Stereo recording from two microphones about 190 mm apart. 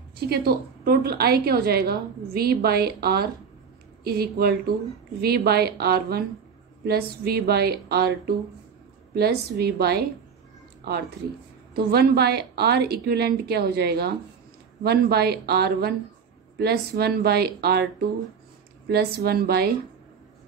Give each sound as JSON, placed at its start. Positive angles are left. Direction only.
{"t": 0.2, "sound": "a woman's voice", "side_deg": -55}
{"t": 11.7, "sound": "a woman's voice", "side_deg": -55}
{"t": 18.9, "sound": "a woman's voice", "side_deg": -55}